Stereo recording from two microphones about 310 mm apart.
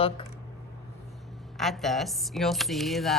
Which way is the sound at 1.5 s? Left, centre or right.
Centre.